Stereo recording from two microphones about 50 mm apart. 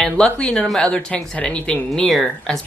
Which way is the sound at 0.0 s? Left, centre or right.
Centre.